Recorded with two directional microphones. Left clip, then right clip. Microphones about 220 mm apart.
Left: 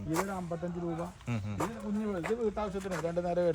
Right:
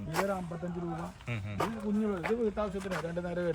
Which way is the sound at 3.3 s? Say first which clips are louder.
Left 5 dB; 25° left (ahead or behind).